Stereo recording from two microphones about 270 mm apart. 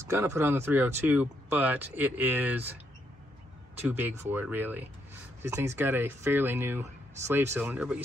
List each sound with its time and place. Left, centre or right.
0.0 s speech: centre
3.9 s speech: centre